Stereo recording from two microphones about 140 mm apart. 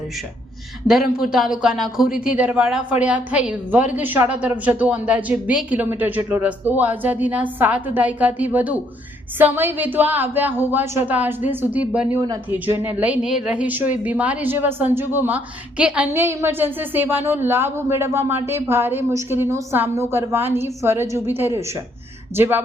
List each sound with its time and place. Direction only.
0.9 s a man's voice: 5° right (ahead or behind)